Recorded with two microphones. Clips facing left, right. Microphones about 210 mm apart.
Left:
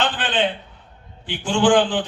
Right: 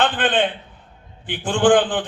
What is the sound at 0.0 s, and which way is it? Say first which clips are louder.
A man's voice: right 3 dB; 55° right (ahead or behind).